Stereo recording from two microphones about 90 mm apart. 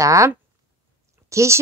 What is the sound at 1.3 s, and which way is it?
Speech, 35° right (ahead or behind).